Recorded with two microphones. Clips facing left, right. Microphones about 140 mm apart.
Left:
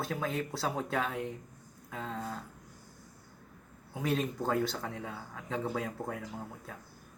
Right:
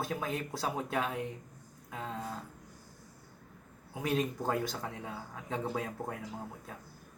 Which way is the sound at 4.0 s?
10° right (ahead or behind).